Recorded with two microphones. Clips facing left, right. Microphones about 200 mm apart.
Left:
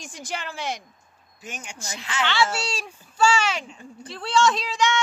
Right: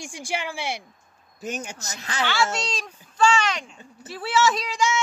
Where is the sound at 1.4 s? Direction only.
40° right (ahead or behind).